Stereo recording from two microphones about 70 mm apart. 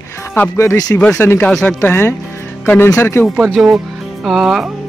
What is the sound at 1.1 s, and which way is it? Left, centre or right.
A man's voice, left.